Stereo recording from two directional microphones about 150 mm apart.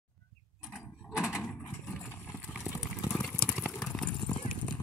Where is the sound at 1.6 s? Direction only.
15° left (ahead or behind).